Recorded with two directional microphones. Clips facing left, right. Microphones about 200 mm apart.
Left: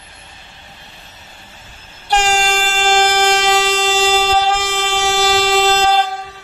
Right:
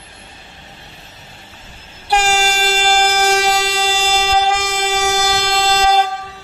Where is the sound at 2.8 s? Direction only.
10° right (ahead or behind).